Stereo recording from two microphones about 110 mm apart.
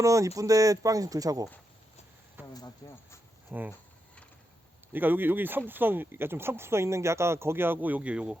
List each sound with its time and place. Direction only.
0.0 s speech: 30° right (ahead or behind)
2.4 s a sound: 20° right (ahead or behind)
2.8 s speech: 40° left (ahead or behind)
3.5 s speech: 15° right (ahead or behind)
4.9 s speech: 15° right (ahead or behind)